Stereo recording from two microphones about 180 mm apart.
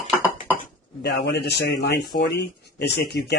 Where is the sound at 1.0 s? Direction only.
65° left (ahead or behind).